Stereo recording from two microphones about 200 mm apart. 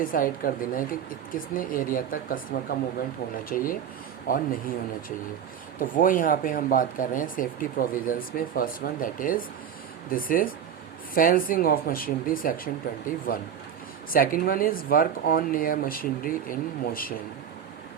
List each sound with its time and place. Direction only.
0.0 s speech: 45° left (ahead or behind)
14.1 s speech: 45° left (ahead or behind)